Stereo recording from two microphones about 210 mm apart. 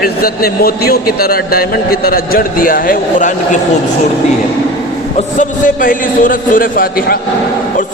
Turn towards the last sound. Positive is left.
turn(degrees=45)  # may be behind; listen again after turning